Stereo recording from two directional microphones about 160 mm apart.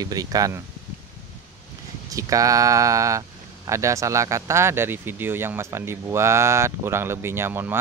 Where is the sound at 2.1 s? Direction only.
20° right (ahead or behind).